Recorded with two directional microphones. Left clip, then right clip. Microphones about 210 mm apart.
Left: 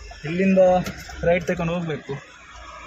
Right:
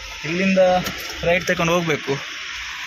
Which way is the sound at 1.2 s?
15° left (ahead or behind).